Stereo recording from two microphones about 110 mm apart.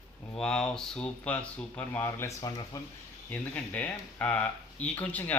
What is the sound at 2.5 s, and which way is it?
Speech, 35° left (ahead or behind).